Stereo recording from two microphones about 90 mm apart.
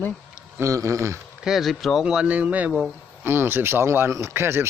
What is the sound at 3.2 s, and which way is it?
Speech, 25° right (ahead or behind).